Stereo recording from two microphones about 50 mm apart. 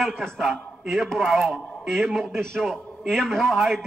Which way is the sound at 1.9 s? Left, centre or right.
Centre.